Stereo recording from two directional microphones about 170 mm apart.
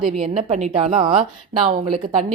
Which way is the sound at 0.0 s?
35° right (ahead or behind).